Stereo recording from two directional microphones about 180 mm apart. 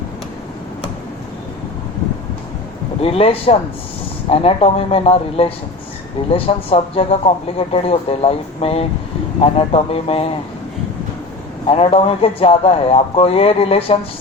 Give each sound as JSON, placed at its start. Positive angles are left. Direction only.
{"t": 3.0, "sound": "speech", "side_deg": 30}
{"t": 11.7, "sound": "speech", "side_deg": 30}